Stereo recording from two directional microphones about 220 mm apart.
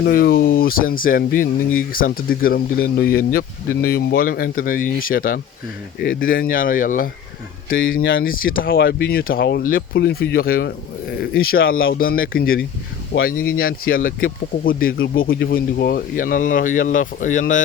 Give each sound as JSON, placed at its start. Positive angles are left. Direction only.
{"t": 0.0, "sound": "speech", "side_deg": 40}